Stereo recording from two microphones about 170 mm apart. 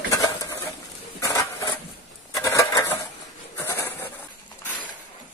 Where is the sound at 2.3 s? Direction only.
20° left (ahead or behind).